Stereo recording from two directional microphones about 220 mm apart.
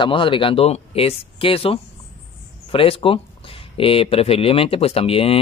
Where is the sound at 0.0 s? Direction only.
25° left (ahead or behind).